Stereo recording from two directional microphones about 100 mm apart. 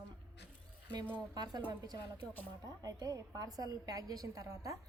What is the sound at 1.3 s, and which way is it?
A woman's voice, 45° right (ahead or behind).